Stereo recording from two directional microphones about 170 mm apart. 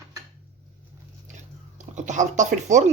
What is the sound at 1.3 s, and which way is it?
Chewing, 45° right (ahead or behind).